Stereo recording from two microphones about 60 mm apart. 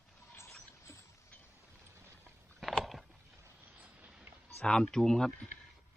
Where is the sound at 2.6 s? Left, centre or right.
Centre.